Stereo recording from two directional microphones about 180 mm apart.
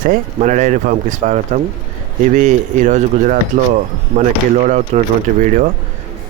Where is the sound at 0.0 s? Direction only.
45° right (ahead or behind).